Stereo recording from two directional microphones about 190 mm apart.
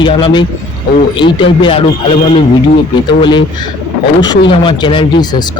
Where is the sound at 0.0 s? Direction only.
25° left (ahead or behind).